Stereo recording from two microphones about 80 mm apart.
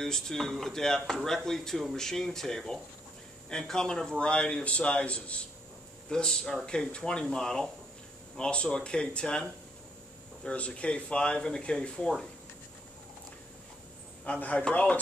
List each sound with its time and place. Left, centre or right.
0.0 s a man's voice: centre
14.2 s a man's voice: centre